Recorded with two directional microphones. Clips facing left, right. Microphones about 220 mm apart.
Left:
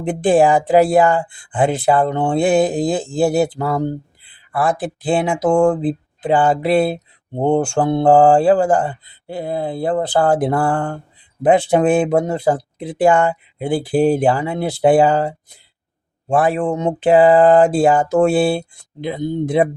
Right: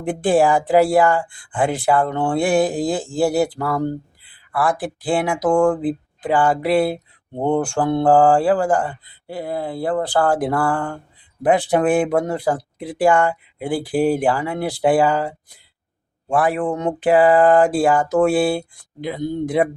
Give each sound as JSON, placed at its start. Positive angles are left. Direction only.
{"t": 0.0, "sound": "speech", "side_deg": 20}
{"t": 16.3, "sound": "speech", "side_deg": 25}